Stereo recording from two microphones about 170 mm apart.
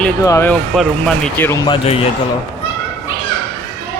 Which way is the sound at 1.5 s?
25° left (ahead or behind).